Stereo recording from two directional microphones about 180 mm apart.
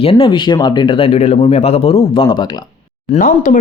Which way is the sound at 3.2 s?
50° left (ahead or behind).